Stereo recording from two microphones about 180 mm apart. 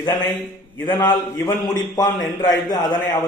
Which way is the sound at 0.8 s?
25° left (ahead or behind).